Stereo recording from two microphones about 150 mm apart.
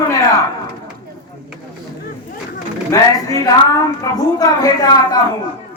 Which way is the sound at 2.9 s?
20° left (ahead or behind).